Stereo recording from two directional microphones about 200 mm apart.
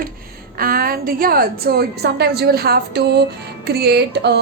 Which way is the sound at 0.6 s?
45° right (ahead or behind).